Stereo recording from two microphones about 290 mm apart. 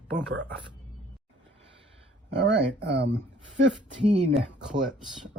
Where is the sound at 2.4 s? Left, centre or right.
Right.